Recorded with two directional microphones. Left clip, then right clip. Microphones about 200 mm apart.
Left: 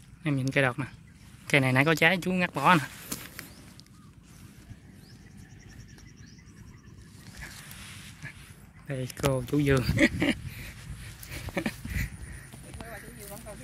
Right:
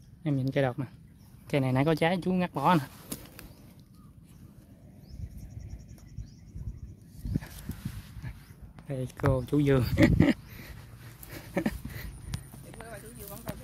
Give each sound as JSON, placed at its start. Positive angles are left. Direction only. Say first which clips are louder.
{"t": 0.2, "sound": "speech", "louder": "left 2 dB", "side_deg": -10}
{"t": 8.8, "sound": "speech", "louder": "left 1 dB", "side_deg": -10}
{"t": 10.1, "sound": "a sound", "louder": "right 2 dB", "side_deg": -35}
{"t": 11.3, "sound": "dog", "louder": "even", "side_deg": -35}